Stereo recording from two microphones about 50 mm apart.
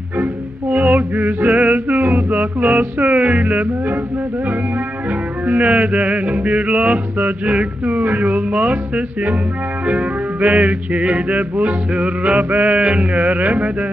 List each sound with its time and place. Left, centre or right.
0.2 s music: right
5.5 s music: right